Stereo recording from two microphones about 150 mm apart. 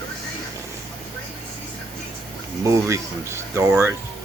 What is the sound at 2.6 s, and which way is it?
Speech, 20° right (ahead or behind).